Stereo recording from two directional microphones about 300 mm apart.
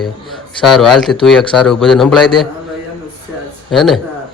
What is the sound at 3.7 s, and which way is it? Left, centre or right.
Speech, centre.